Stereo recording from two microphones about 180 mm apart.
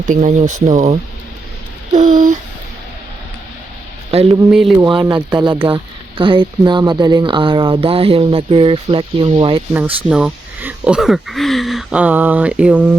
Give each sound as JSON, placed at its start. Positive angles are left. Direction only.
{"t": 0.0, "sound": "speech", "side_deg": -45}
{"t": 1.9, "sound": "a sound", "side_deg": -45}
{"t": 4.3, "sound": "speech", "side_deg": -15}
{"t": 9.7, "sound": "speech", "side_deg": -5}